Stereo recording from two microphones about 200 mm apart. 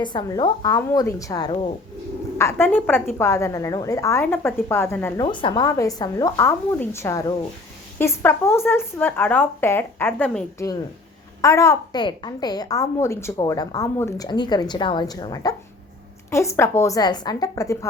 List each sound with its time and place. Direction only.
0.0 s a woman's voice: 20° left (ahead or behind)
5.2 s speech: 25° left (ahead or behind); by 10.4 s 5° left (ahead or behind)
11.4 s a woman's voice: 15° left (ahead or behind)